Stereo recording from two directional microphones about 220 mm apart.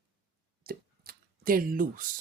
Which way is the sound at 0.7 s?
45° right (ahead or behind).